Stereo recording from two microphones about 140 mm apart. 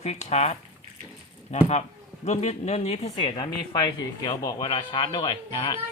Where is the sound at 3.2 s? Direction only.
35° left (ahead or behind).